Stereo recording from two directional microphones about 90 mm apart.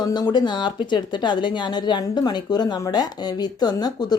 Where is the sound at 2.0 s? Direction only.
45° left (ahead or behind).